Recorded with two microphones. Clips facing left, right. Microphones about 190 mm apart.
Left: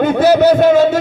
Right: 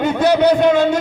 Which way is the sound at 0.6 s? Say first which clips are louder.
Left 3 dB; 40° left (ahead or behind).